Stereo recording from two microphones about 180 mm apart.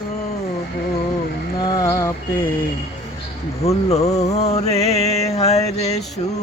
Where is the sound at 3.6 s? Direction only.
35° left (ahead or behind).